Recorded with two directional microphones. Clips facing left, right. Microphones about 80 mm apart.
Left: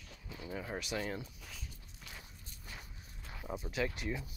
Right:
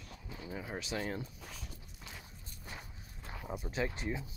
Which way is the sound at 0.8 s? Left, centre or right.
Right.